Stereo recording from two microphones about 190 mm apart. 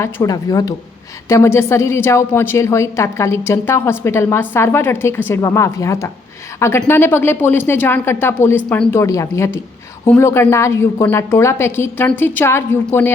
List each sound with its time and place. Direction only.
0.0 s a woman's voice: 15° left (ahead or behind)